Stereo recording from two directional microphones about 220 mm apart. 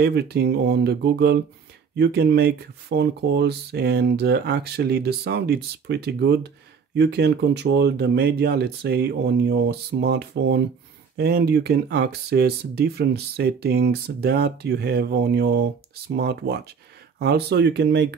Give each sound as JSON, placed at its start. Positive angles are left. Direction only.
{"t": 0.0, "sound": "speech", "side_deg": -50}